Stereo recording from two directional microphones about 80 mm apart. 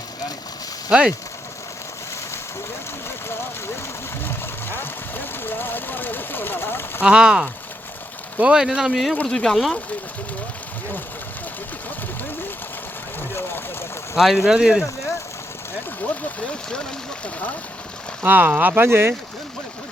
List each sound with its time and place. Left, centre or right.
0.9 s speech: centre
4.3 s vehicle: left
7.0 s speech: centre
14.2 s speech: centre
18.2 s speech: right